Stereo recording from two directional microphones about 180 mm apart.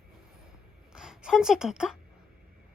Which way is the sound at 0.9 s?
5° right (ahead or behind).